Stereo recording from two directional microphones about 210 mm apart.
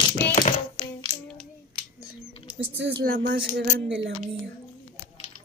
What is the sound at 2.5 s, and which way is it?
Speech, 55° right (ahead or behind).